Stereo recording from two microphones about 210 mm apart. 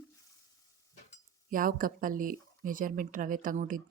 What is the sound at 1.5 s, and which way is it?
Speech, 40° right (ahead or behind).